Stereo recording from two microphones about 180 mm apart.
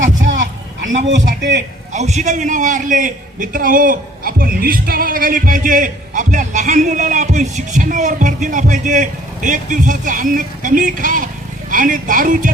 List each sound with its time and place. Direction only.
0.0 s a sound: 45° right (ahead or behind)
1.4 s a man's voice: 75° right (ahead or behind)
1.9 s a man's voice: 40° right (ahead or behind)